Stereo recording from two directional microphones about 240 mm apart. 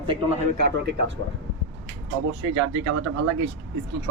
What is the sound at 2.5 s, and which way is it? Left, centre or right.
Speech, right.